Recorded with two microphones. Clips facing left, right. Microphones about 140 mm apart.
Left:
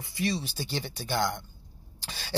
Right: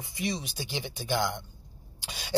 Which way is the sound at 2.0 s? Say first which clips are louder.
Even; 15° right (ahead or behind).